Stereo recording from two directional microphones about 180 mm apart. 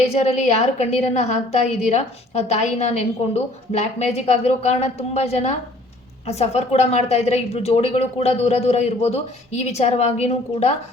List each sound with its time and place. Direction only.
0.1 s a woman's voice: 40° left (ahead or behind)